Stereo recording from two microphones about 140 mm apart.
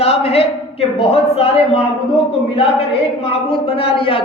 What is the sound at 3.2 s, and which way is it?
A man's voice, 45° left (ahead or behind).